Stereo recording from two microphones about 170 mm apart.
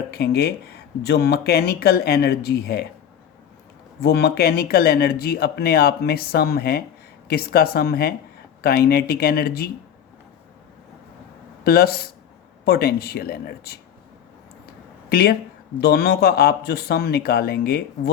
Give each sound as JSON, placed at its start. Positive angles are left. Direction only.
{"t": 0.1, "sound": "speech", "side_deg": 70}
{"t": 4.0, "sound": "speech", "side_deg": 70}
{"t": 11.6, "sound": "speech", "side_deg": 65}
{"t": 15.1, "sound": "speech", "side_deg": 65}